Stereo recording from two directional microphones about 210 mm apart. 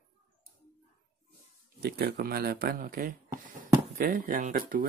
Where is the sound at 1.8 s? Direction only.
50° right (ahead or behind).